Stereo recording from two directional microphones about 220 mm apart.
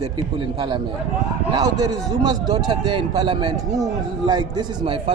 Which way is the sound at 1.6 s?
15° right (ahead or behind).